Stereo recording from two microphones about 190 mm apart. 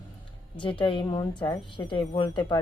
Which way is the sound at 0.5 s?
25° left (ahead or behind).